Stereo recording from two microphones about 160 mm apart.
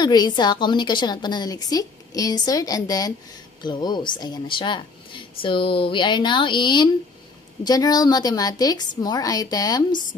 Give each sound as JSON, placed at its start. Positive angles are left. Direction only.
{"t": 0.0, "sound": "a woman's voice", "side_deg": 25}